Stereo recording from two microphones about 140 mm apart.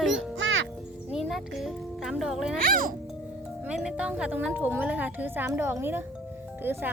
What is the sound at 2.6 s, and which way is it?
Speech, 85° right.